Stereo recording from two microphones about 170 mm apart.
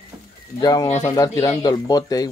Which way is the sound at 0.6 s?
25° left (ahead or behind).